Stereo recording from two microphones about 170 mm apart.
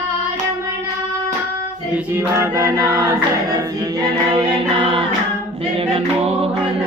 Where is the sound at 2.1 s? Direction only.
15° right (ahead or behind); by 5.0 s 30° right (ahead or behind).